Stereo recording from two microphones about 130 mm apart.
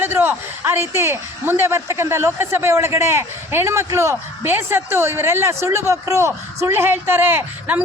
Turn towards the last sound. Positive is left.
turn(degrees=-15)  # may be behind; listen again after turning